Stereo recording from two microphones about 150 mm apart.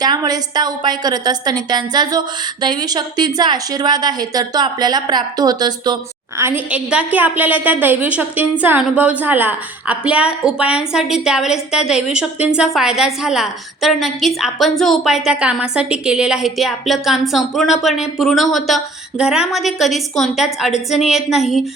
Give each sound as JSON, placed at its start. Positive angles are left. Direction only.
{"t": 0.0, "sound": "a woman's voice", "side_deg": -25}
{"t": 6.4, "sound": "a woman's voice", "side_deg": -10}